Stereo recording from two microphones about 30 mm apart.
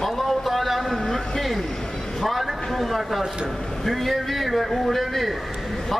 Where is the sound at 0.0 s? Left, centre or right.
Centre.